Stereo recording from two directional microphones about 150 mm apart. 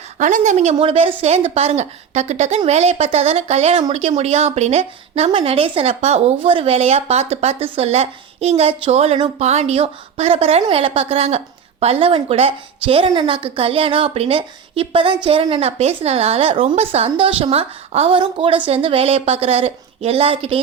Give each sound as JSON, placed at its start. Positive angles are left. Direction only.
{"t": 0.2, "sound": "a woman's voice", "side_deg": -55}